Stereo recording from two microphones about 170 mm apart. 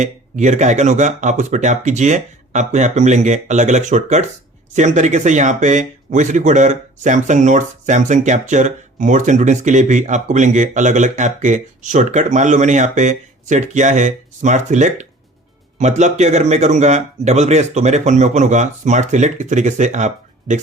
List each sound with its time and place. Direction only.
0.0 s speech: 45° right (ahead or behind)